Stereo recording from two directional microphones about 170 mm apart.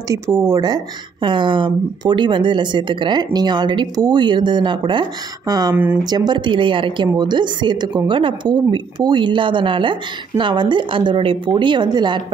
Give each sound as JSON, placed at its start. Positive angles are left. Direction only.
{"t": 0.1, "sound": "a woman's voice", "side_deg": -15}